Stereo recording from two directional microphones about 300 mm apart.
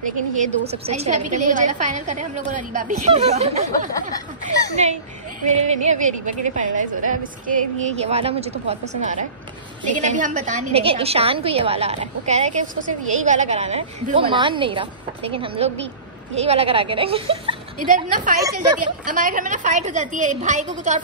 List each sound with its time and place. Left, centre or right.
0.0 s a woman's voice: right
4.1 s speech: centre
5.4 s a woman's voice: right